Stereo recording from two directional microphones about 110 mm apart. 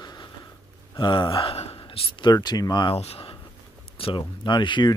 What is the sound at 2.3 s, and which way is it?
Speech, 40° left (ahead or behind).